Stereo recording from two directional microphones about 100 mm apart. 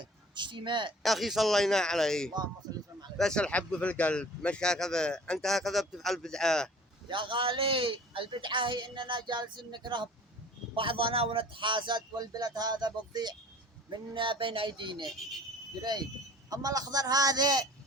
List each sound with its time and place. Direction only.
0.3 s a woman's voice: 50° right (ahead or behind)
1.0 s speech: centre (ahead or behind)
7.1 s a woman's voice: 55° right (ahead or behind)
10.8 s a woman's voice: 60° right (ahead or behind); by 13.3 s 45° right (ahead or behind)
13.9 s speech: 55° right (ahead or behind)
15.0 s speech: centre (ahead or behind)
15.8 s a woman's voice: 45° right (ahead or behind)